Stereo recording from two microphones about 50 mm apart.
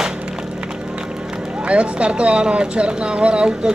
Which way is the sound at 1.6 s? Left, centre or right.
Right.